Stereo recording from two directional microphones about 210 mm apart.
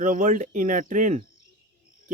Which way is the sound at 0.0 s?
40° right (ahead or behind).